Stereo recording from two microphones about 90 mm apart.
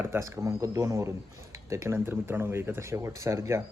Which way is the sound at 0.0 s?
30° right (ahead or behind).